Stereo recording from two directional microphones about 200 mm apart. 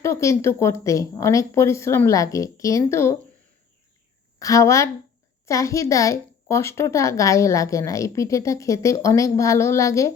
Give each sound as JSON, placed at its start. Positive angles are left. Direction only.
{"t": 0.0, "sound": "a woman's voice", "side_deg": 15}
{"t": 4.4, "sound": "a woman's voice", "side_deg": 15}